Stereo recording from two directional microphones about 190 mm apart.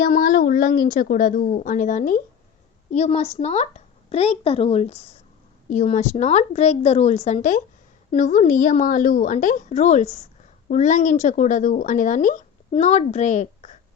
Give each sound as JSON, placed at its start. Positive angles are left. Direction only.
{"t": 0.0, "sound": "speech", "side_deg": 50}